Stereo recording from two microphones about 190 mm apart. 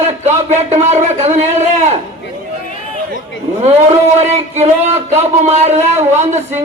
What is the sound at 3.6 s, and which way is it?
Speech, 35° right (ahead or behind).